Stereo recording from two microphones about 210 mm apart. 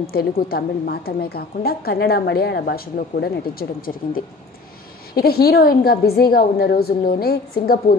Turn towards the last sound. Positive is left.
turn(degrees=45)  # may be behind; listen again after turning